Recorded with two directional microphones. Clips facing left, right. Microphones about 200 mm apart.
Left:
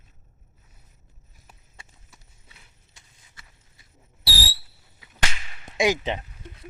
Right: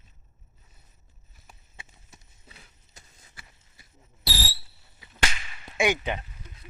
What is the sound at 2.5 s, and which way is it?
Run, 35° right (ahead or behind).